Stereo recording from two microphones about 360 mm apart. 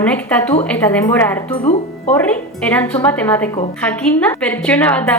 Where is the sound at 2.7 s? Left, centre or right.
Centre.